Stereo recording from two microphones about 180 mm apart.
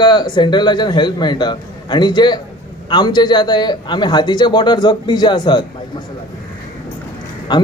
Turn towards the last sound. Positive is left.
turn(degrees=25)  # may be behind; listen again after turning